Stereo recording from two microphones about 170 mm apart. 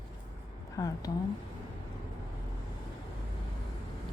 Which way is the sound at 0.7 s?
20° left (ahead or behind).